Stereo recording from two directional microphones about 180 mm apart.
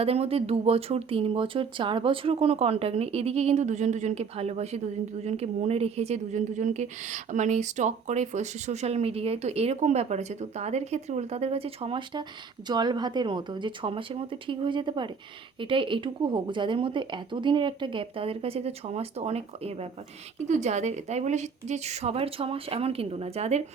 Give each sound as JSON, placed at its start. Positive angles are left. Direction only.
{"t": 0.0, "sound": "a woman's voice", "side_deg": -35}